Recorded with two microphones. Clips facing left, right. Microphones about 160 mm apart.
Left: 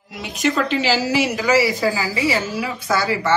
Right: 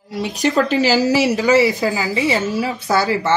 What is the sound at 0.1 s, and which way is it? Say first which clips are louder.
A woman's voice: right 3 dB; 35° right (ahead or behind).